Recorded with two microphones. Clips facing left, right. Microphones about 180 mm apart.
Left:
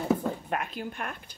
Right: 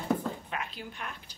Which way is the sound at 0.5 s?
50° left (ahead or behind).